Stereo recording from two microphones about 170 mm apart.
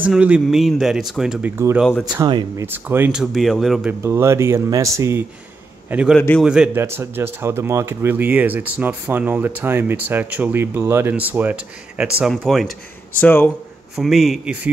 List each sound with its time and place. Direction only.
0.0 s speech: 5° right (ahead or behind)
2.2 s speech: 25° right (ahead or behind)
2.6 s speech: 10° right (ahead or behind)
4.0 s a man's voice: 15° right (ahead or behind)
6.1 s speech: 5° left (ahead or behind)
6.4 s speech: 5° right (ahead or behind); by 13.5 s 10° left (ahead or behind)
13.9 s speech: centre (ahead or behind)